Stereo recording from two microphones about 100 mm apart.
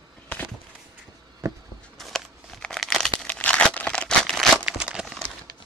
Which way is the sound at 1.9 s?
5° left (ahead or behind).